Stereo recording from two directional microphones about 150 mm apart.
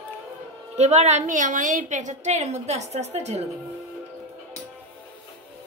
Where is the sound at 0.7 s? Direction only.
50° right (ahead or behind).